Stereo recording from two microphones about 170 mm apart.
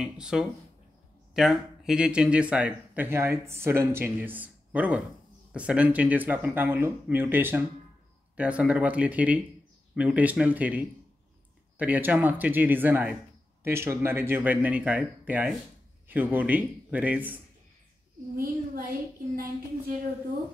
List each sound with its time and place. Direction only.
0.0 s speech: 5° right (ahead or behind)
18.3 s a child's voice: 60° right (ahead or behind)